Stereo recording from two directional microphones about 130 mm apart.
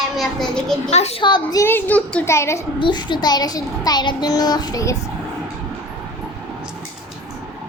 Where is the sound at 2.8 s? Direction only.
35° left (ahead or behind).